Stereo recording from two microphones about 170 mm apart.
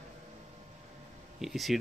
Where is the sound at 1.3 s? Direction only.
Centre (ahead or behind).